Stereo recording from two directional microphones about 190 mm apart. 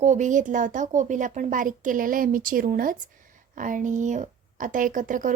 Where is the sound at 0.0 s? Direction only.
40° right (ahead or behind).